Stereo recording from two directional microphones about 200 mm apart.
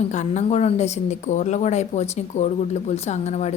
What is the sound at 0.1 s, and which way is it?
A woman's voice, 35° left (ahead or behind).